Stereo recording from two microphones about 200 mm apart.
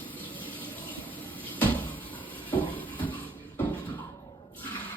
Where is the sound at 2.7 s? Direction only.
10° left (ahead or behind).